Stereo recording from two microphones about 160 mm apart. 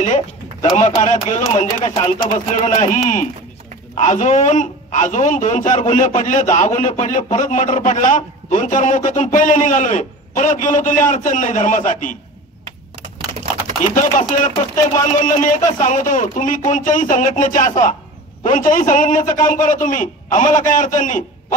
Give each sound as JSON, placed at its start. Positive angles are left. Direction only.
{"t": 0.0, "sound": "a man's voice", "side_deg": 45}
{"t": 13.8, "sound": "a man's voice", "side_deg": 55}